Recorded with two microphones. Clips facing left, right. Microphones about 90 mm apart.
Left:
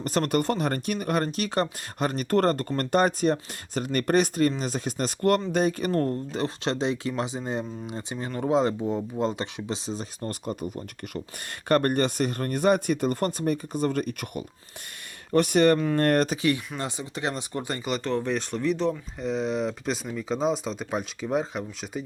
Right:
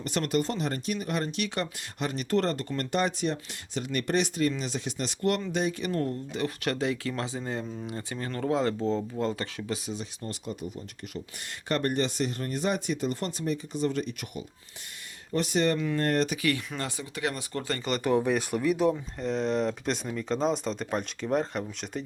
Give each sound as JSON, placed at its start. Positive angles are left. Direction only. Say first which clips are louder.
{"t": 0.0, "sound": "speech", "louder": "left 3 dB", "side_deg": 40}
{"t": 6.6, "sound": "speech", "louder": "left 2 dB", "side_deg": 25}
{"t": 16.4, "sound": "speech", "louder": "left 3 dB", "side_deg": 20}
{"t": 18.0, "sound": "speech", "louder": "right 5 dB", "side_deg": -10}